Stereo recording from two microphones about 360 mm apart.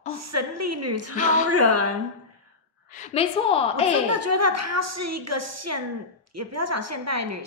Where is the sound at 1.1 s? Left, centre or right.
Left.